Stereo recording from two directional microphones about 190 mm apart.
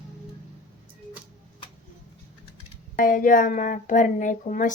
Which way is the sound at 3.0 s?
45° left (ahead or behind).